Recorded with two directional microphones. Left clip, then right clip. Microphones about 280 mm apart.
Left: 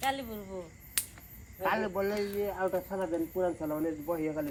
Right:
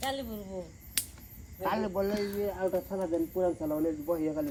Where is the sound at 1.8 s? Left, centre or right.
Left.